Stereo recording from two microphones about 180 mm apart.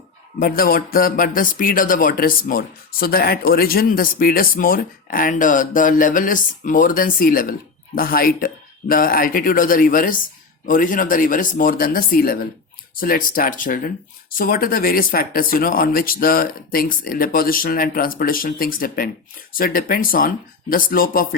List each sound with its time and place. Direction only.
0.3 s speech: 55° left (ahead or behind)